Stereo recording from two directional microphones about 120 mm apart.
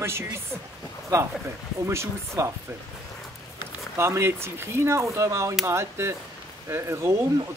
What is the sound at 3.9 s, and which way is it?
Speech, 25° right (ahead or behind).